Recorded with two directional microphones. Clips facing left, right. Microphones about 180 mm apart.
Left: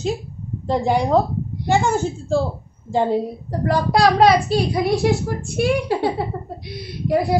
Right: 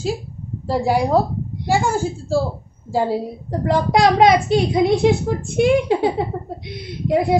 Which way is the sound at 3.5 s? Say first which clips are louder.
Right 2 dB; 20° right (ahead or behind).